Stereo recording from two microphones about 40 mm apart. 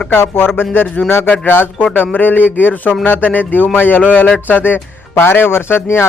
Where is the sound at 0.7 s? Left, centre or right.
Left.